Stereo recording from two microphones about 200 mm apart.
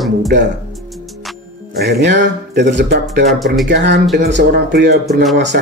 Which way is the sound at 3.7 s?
60° right (ahead or behind).